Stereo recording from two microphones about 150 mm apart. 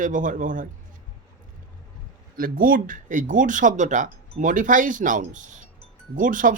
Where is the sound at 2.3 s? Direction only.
70° right (ahead or behind).